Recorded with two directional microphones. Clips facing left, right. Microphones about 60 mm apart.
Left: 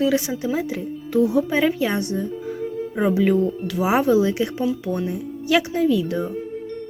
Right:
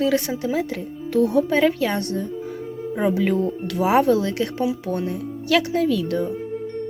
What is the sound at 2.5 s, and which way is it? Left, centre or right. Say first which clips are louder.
Speech: left 2 dB; centre.